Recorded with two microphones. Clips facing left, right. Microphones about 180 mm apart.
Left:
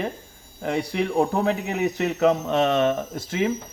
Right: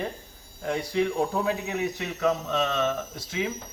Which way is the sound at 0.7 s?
65° left (ahead or behind).